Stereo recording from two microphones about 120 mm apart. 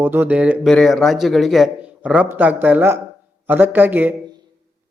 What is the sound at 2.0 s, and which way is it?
A man's voice, 10° right (ahead or behind).